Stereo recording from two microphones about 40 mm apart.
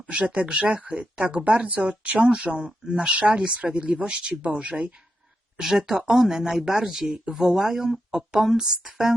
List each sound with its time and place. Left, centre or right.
0.1 s speech: right
2.2 s speech: right
3.2 s speech: right
5.9 s speech: centre